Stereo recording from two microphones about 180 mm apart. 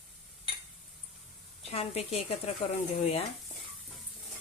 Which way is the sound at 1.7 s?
35° left (ahead or behind).